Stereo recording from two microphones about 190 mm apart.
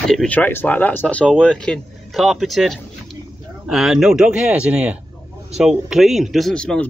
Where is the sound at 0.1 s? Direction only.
5° left (ahead or behind).